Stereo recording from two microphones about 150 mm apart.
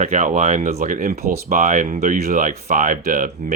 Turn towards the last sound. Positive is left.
turn(degrees=-65)  # may be behind; listen again after turning